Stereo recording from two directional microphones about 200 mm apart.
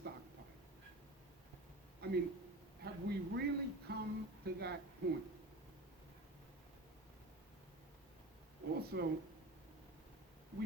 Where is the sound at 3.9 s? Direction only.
55° right (ahead or behind).